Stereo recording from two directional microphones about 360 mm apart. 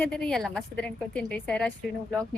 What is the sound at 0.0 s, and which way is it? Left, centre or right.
A woman's voice, centre.